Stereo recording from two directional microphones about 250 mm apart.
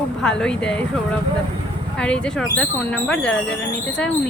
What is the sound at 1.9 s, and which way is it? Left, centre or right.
A woman's voice, centre.